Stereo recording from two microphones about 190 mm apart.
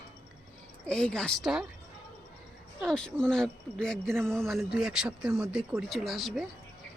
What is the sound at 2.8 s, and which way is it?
Speech, 5° left (ahead or behind).